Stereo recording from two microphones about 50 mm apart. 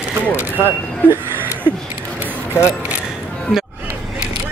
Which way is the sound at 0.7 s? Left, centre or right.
Right.